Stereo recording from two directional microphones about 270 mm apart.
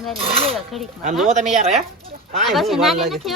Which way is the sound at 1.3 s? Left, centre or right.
Right.